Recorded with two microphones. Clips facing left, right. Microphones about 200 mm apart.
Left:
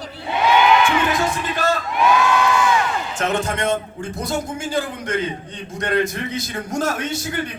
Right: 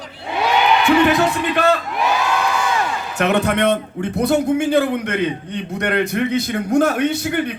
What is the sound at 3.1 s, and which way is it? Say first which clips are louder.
A man's voice: right 7 dB; 65° right (ahead or behind).